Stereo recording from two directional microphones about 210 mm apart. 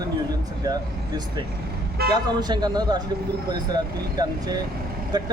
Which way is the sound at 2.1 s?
20° right (ahead or behind).